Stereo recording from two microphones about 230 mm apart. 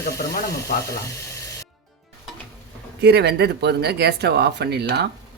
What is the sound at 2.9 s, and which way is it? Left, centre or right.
Speech, right.